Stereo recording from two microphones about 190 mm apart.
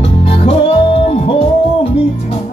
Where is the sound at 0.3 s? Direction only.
30° left (ahead or behind).